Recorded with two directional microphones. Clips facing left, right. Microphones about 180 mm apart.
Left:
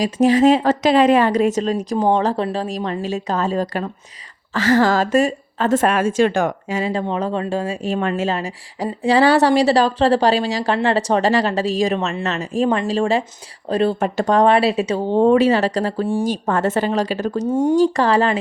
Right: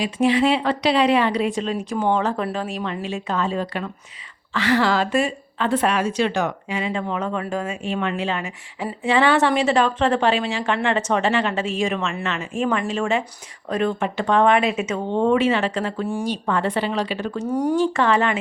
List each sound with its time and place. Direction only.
0.0 s a woman's voice: 40° left (ahead or behind)
17.4 s speech: 20° left (ahead or behind)
17.7 s speech: 40° left (ahead or behind)